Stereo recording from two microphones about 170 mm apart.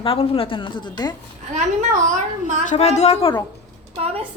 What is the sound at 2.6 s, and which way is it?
Speech, 40° left (ahead or behind).